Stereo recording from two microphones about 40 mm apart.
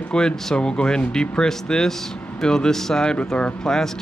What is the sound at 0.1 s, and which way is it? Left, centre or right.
Speech, centre.